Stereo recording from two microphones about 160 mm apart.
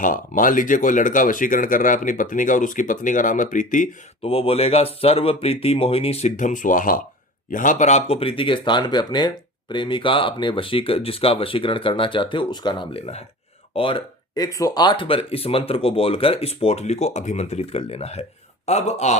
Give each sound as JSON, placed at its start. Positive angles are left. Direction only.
{"t": 0.0, "sound": "speech", "side_deg": 55}
{"t": 4.2, "sound": "speech", "side_deg": 35}